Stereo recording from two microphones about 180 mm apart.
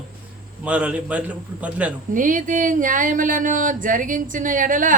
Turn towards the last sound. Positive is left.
turn(degrees=-45)  # may be behind; listen again after turning